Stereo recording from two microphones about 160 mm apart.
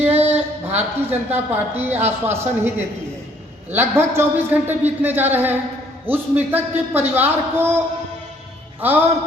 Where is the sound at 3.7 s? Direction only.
15° right (ahead or behind).